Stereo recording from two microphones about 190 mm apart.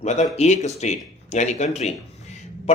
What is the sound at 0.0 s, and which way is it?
Speech, 35° left (ahead or behind).